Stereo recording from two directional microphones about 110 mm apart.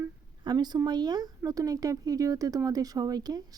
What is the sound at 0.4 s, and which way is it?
Speech, 40° right (ahead or behind).